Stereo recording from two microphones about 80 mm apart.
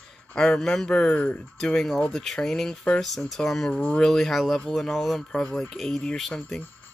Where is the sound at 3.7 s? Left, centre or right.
Centre.